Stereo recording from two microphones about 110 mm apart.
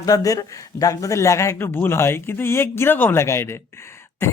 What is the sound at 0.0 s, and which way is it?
Speech, 30° left (ahead or behind).